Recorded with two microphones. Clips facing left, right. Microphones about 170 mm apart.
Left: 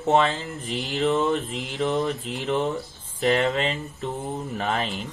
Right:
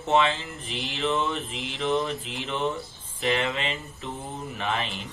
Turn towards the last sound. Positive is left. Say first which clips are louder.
# left 3 dB
turn(degrees=40)  # may be behind; listen again after turning